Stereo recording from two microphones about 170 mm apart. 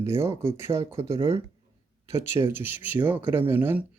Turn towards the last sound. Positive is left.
turn(degrees=-10)  # may be behind; listen again after turning